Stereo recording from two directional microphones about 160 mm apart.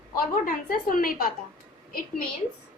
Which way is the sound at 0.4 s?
60° left (ahead or behind).